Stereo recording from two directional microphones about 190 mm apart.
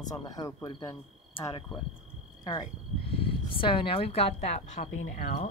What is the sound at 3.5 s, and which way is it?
A woman's voice, 25° left (ahead or behind).